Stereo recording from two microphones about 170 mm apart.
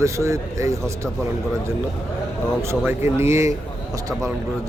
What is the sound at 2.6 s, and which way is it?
Speech, 15° right (ahead or behind).